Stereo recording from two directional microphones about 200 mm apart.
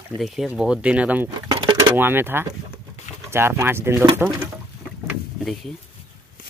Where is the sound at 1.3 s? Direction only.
20° right (ahead or behind).